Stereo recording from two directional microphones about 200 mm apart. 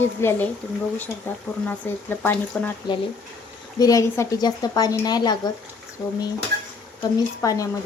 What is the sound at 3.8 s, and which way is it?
Speech, 15° left (ahead or behind).